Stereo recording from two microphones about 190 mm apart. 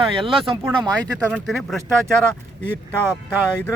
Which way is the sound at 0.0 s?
30° right (ahead or behind).